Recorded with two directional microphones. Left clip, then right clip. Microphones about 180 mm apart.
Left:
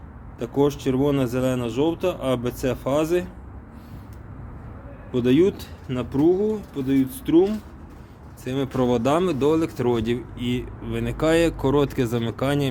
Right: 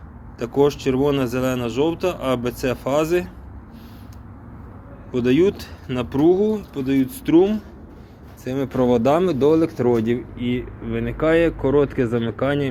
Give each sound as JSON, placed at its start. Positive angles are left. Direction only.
{"t": 0.3, "sound": "speech", "side_deg": -5}
{"t": 5.1, "sound": "speech", "side_deg": 5}
{"t": 8.4, "sound": "speech", "side_deg": 5}
{"t": 10.3, "sound": "speech", "side_deg": 15}